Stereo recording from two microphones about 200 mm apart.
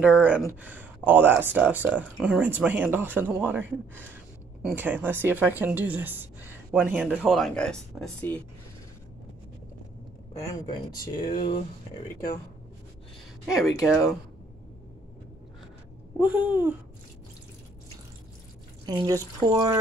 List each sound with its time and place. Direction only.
0.0 s speech: 5° right (ahead or behind)
10.7 s speech: 20° left (ahead or behind)
13.7 s speech: 15° left (ahead or behind)
16.2 s speech: 10° right (ahead or behind)
18.9 s speech: 20° right (ahead or behind)